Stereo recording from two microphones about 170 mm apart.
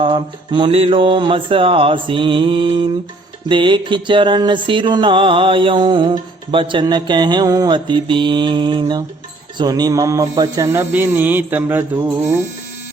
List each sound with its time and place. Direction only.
0.0 s music: 30° right (ahead or behind)
9.6 s speech: 25° right (ahead or behind)